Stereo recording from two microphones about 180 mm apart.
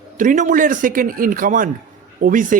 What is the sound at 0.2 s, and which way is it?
A man's voice, 45° right (ahead or behind).